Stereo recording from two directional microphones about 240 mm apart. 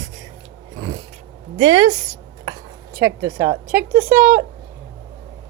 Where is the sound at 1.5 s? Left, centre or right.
Centre.